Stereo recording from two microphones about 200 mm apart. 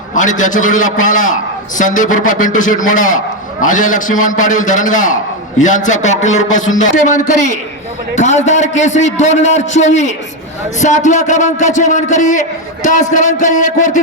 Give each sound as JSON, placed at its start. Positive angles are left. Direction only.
{"t": 0.1, "sound": "a man's voice", "side_deg": 40}